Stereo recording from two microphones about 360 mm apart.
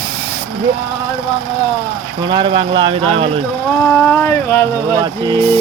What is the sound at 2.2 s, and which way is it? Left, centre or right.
Speech, centre.